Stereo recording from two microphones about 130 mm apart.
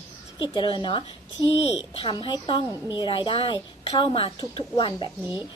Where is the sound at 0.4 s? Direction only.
35° left (ahead or behind).